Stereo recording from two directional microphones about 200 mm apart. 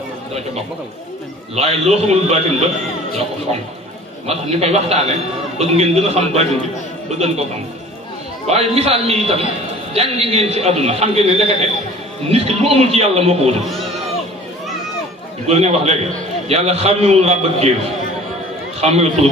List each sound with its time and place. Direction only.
1.5 s a man's voice: 30° right (ahead or behind)
4.3 s a man's voice: 30° right (ahead or behind)
8.5 s a man's voice: 30° right (ahead or behind)
15.4 s a man's voice: 30° right (ahead or behind)
18.8 s a man's voice: 30° right (ahead or behind)